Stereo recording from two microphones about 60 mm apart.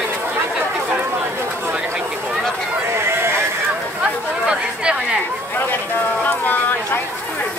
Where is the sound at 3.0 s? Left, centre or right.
Right.